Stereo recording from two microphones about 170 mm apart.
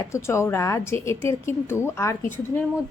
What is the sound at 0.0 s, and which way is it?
A woman's voice, 15° left (ahead or behind).